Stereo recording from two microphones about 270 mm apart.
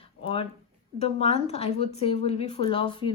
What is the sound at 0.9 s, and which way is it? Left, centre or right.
Speech, left.